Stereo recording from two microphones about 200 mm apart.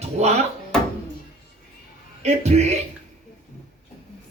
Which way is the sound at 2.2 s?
35° right (ahead or behind).